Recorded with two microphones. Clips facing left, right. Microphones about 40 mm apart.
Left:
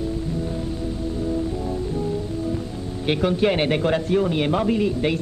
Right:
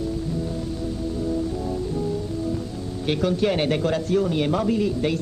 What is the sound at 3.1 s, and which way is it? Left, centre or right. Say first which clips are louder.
A man's voice: left 2 dB; left.